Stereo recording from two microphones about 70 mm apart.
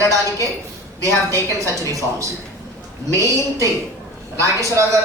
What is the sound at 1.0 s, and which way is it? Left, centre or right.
Speech, right.